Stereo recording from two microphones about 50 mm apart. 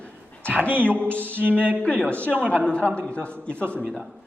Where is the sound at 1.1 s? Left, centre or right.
Right.